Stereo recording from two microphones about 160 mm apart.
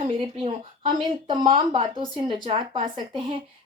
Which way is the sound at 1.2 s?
30° right (ahead or behind).